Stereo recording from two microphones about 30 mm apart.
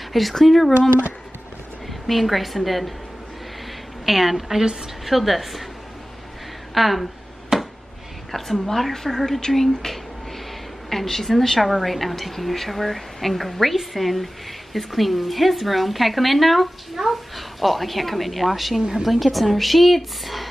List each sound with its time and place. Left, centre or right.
0.1 s a woman's voice: centre
2.0 s a woman's voice: centre
4.0 s a woman's voice: centre
6.7 s speech: centre
7.5 s a sound: centre
8.3 s a woman's voice: centre
10.9 s a woman's voice: centre
18.8 s a woman's voice: centre
19.0 s a woman's voice: centre